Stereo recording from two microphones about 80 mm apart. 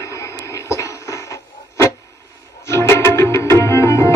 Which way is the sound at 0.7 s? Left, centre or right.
Left.